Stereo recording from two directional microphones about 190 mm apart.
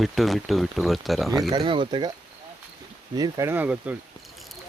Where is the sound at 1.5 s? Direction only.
25° right (ahead or behind).